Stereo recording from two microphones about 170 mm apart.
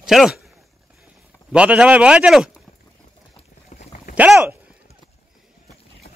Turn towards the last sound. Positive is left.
turn(degrees=-5)  # may be behind; listen again after turning